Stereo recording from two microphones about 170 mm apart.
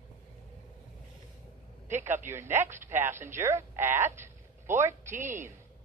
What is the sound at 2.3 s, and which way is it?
Speech, 15° right (ahead or behind).